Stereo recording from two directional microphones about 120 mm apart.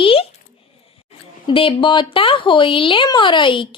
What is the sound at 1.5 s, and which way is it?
Speech, 45° left (ahead or behind).